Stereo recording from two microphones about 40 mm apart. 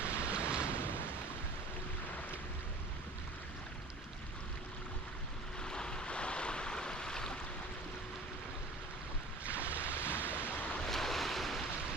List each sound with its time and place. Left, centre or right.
0.0 s waves: right
5.6 s waves: centre
9.5 s waves: right
10.8 s waves: centre